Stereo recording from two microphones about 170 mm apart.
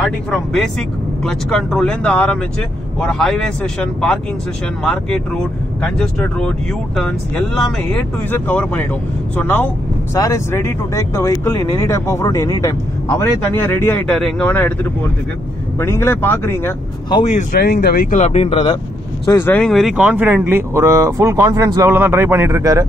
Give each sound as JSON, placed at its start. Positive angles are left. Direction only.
{"t": 0.0, "sound": "speech", "side_deg": 0}
{"t": 14.0, "sound": "speech", "side_deg": 5}
{"t": 15.8, "sound": "speech", "side_deg": 15}
{"t": 17.2, "sound": "speech", "side_deg": 45}
{"t": 17.6, "sound": "speech", "side_deg": 70}
{"t": 18.2, "sound": "speech", "side_deg": 35}
{"t": 19.2, "sound": "speech", "side_deg": 15}